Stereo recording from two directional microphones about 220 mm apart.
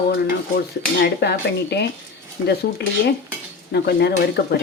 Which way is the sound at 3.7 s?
50° left (ahead or behind).